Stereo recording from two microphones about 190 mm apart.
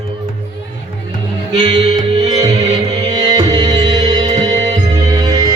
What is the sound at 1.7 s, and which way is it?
Music, 35° right (ahead or behind).